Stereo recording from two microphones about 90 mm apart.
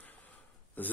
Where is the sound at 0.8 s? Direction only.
20° left (ahead or behind).